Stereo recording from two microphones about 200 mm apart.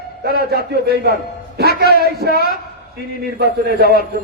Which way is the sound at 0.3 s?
50° right (ahead or behind).